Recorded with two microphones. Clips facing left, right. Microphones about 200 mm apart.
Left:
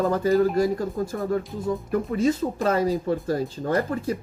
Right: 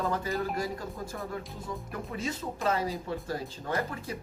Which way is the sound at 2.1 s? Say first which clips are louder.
Left 11 dB; 40° left (ahead or behind).